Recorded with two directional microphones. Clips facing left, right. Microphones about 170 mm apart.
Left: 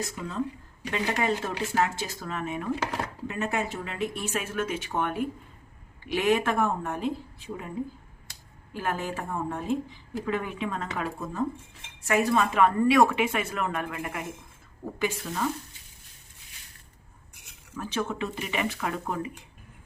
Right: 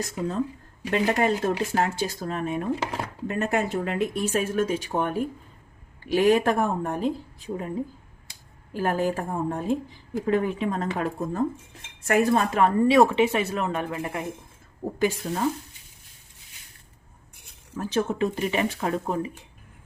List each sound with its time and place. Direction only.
0.9 s speech: 40° right (ahead or behind)
3.2 s speech: 45° right (ahead or behind)
8.7 s a woman's voice: 35° right (ahead or behind)
17.7 s speech: 40° right (ahead or behind)